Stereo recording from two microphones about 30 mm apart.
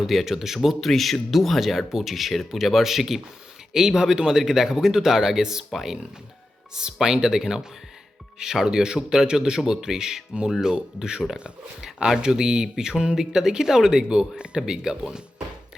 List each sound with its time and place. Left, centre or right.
0.0 s speech: centre
0.8 s speech: centre
8.6 s speech: right
14.1 s speech: right